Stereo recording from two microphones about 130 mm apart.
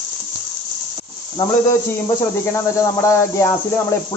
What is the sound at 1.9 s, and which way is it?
Speech, 20° left (ahead or behind).